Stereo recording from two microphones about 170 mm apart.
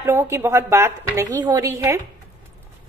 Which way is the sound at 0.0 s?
15° right (ahead or behind).